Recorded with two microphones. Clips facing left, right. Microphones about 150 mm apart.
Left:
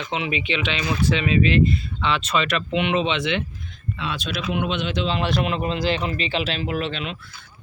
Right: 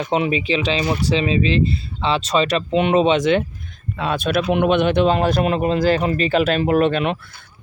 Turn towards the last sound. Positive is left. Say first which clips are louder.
# right 10 dB
turn(degrees=-55)  # may be behind; listen again after turning